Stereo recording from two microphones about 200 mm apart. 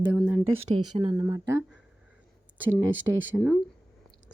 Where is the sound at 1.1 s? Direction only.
15° right (ahead or behind).